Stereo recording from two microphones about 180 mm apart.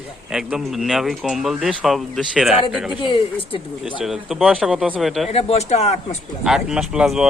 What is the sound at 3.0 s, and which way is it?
Speech, 25° left (ahead or behind).